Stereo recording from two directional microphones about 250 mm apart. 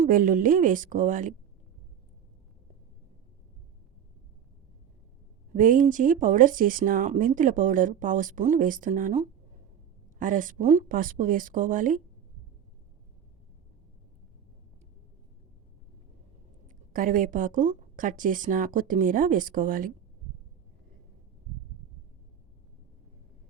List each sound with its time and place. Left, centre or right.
0.0 s speech: right
5.5 s speech: right
16.6 s speech: right